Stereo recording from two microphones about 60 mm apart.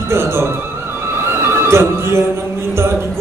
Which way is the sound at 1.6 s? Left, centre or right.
Right.